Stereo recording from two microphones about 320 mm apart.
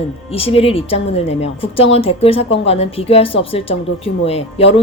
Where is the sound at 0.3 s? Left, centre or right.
Centre.